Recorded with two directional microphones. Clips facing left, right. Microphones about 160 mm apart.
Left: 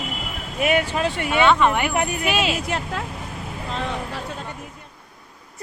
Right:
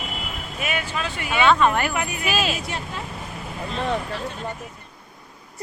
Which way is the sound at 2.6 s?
90° left.